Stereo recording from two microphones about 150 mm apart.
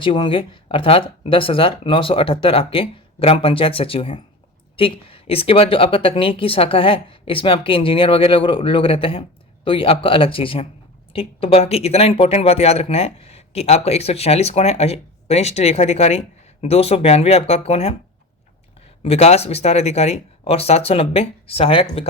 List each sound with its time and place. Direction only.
0.0 s speech: 35° left (ahead or behind)
19.0 s speech: 45° left (ahead or behind)